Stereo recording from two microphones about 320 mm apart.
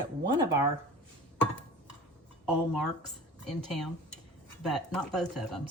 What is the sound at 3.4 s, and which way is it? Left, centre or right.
Speech, centre.